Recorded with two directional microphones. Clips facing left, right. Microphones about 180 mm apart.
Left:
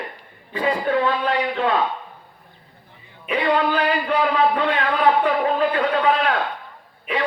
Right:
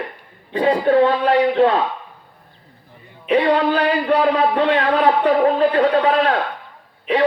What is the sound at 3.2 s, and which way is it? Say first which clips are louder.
A man's voice: right 4 dB; 35° right (ahead or behind).